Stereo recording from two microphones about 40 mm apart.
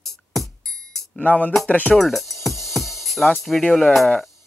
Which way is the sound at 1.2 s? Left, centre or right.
Left.